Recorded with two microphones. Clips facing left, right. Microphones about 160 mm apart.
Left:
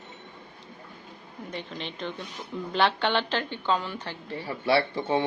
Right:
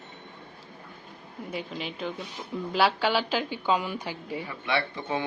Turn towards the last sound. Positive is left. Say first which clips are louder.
# left 5 dB
turn(degrees=30)  # may be behind; listen again after turning